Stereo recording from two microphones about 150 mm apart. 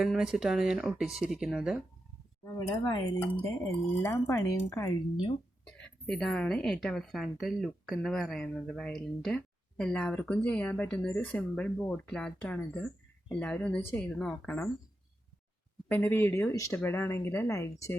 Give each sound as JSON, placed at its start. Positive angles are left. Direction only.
{"t": 0.0, "sound": "a woman's voice", "side_deg": 0}
{"t": 2.4, "sound": "speech", "side_deg": 20}
{"t": 5.6, "sound": "a woman's voice", "side_deg": 5}
{"t": 15.9, "sound": "speech", "side_deg": 15}